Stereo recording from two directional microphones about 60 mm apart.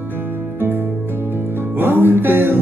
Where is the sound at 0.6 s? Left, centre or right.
Right.